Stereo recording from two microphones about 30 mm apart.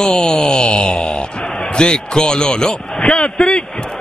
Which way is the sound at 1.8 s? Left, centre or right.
Left.